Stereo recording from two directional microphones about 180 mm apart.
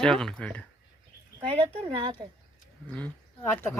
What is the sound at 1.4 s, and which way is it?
Speech, 30° right (ahead or behind).